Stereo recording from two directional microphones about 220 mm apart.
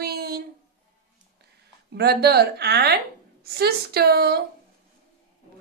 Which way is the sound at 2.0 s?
45° right (ahead or behind).